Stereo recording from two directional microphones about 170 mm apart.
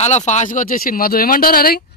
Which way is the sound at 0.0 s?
40° left (ahead or behind).